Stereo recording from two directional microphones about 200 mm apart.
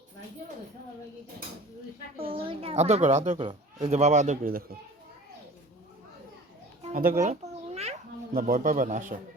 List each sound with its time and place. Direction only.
2.1 s a woman's voice: 25° right (ahead or behind)
6.8 s a sound: 40° right (ahead or behind)
8.4 s a man's voice: 45° right (ahead or behind)